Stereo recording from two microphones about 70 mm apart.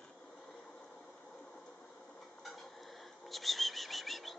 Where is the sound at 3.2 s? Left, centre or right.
Centre.